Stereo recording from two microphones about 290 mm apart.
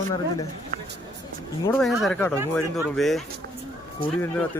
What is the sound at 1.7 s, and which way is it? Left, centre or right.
A man's voice, centre.